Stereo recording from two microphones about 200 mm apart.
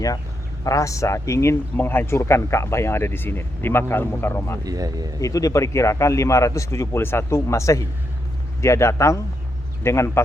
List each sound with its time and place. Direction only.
0.6 s speech: 15° left (ahead or behind)
4.6 s speech: 20° right (ahead or behind)
5.2 s speech: 15° left (ahead or behind)